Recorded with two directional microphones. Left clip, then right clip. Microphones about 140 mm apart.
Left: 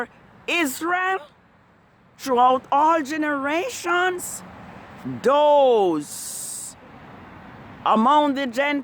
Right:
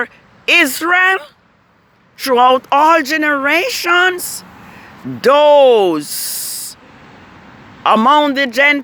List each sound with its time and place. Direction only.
0.0 s speech: 15° right (ahead or behind)
7.9 s a man's voice: 15° right (ahead or behind)